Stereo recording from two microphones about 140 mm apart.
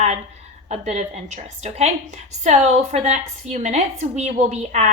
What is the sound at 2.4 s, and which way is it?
A woman's voice, 55° right (ahead or behind).